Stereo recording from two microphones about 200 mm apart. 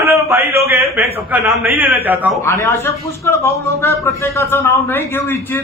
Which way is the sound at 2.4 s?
15° left (ahead or behind).